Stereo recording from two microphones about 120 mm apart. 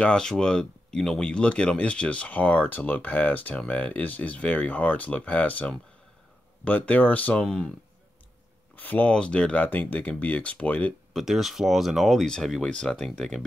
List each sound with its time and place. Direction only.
0.0 s speech: 5° left (ahead or behind)
8.7 s speech: 15° left (ahead or behind)
11.1 s speech: centre (ahead or behind)